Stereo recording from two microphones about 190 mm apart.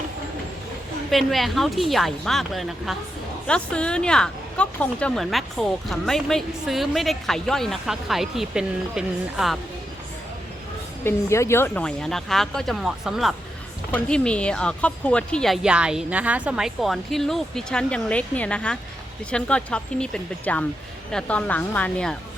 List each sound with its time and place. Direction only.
1.1 s speech: centre (ahead or behind)
11.0 s a woman's voice: 15° left (ahead or behind)